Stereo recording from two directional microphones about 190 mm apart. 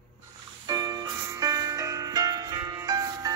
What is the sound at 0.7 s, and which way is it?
Music, 20° right (ahead or behind).